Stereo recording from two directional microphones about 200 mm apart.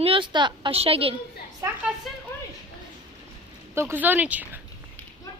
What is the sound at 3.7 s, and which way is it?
Speech, 10° right (ahead or behind).